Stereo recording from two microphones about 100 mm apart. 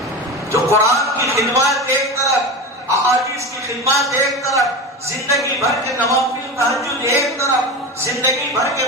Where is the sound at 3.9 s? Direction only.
30° left (ahead or behind).